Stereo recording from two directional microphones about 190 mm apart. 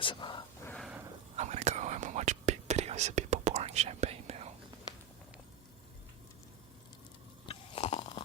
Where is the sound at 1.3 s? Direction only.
35° right (ahead or behind).